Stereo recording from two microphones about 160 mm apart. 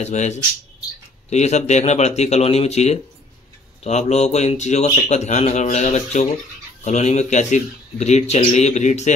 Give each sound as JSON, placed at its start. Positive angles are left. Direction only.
{"t": 0.0, "sound": "speech", "side_deg": 45}